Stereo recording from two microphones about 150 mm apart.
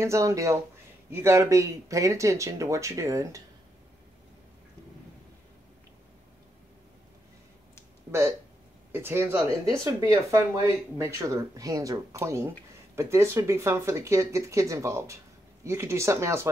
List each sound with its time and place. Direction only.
0.0 s speech: 20° right (ahead or behind)
8.9 s speech: 15° right (ahead or behind)